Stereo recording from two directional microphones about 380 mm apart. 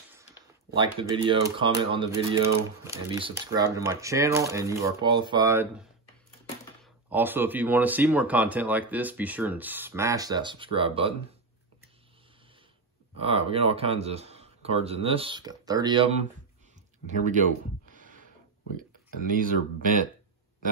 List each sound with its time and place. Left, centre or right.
0.1 s speech: centre
13.2 s speech: centre
17.9 s a sound: centre
19.2 s speech: right